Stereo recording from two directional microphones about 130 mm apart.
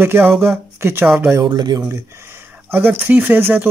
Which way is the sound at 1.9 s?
20° right (ahead or behind).